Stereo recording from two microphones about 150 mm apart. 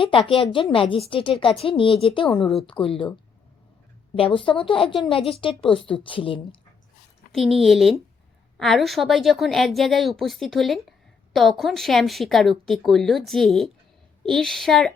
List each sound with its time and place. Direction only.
0.0 s a woman's voice: 35° left (ahead or behind)
2.4 s speech: centre (ahead or behind)
2.8 s a woman's voice: 35° left (ahead or behind)
4.4 s a woman's voice: 35° left (ahead or behind)
7.3 s speech: centre (ahead or behind)